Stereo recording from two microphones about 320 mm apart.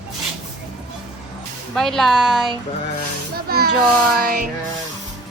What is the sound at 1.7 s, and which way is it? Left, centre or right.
Speech, centre.